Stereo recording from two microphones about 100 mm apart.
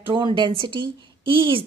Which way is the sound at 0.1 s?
55° right (ahead or behind).